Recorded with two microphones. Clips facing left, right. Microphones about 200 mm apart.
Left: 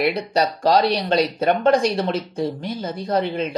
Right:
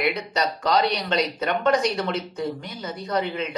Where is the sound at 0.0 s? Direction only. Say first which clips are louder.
Left 5 dB; 30° left (ahead or behind).